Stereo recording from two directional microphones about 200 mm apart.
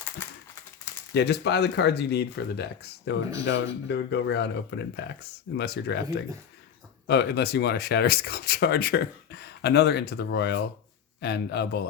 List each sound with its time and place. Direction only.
1.1 s speech: 55° left (ahead or behind)
7.1 s speech: 55° left (ahead or behind)